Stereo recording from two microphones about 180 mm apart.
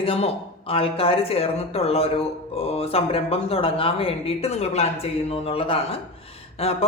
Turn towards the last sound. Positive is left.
turn(degrees=35)  # may be behind; listen again after turning